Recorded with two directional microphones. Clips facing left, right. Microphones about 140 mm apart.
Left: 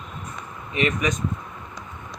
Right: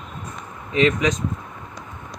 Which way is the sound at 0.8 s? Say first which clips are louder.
Right 5 dB; 90° right.